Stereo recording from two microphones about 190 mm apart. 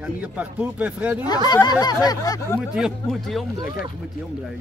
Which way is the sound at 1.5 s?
20° left (ahead or behind).